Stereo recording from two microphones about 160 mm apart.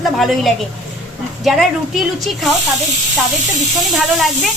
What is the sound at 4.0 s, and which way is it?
Speech, centre (ahead or behind).